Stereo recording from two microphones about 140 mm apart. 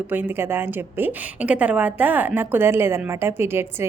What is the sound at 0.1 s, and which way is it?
A woman's voice, 15° right (ahead or behind).